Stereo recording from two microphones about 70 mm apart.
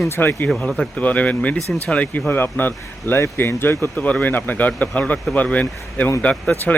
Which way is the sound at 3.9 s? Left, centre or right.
Left.